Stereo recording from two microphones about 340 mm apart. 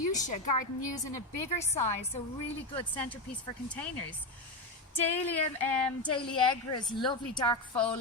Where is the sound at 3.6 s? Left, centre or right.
Centre.